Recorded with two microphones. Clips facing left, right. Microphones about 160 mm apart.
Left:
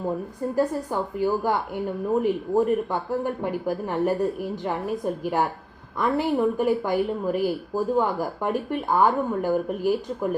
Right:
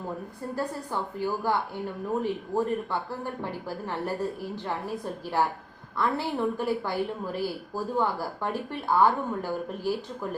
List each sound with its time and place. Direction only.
0.9 s speech: 15° left (ahead or behind)